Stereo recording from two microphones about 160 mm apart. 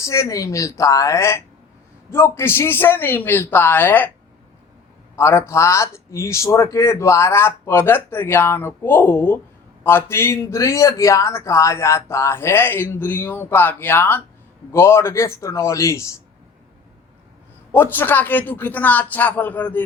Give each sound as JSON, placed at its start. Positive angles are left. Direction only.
{"t": 0.0, "sound": "a woman's voice", "side_deg": 20}
{"t": 5.1, "sound": "a man's voice", "side_deg": 15}
{"t": 17.7, "sound": "a man's voice", "side_deg": 10}